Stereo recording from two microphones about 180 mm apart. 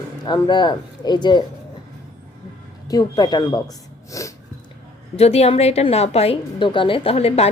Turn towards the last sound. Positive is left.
turn(degrees=35)  # may be behind; listen again after turning